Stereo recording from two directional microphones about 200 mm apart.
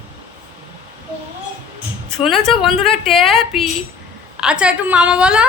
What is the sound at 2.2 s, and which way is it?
A woman's voice, centre (ahead or behind).